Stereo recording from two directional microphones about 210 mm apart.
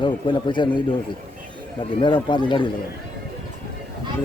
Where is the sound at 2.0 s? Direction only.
20° left (ahead or behind).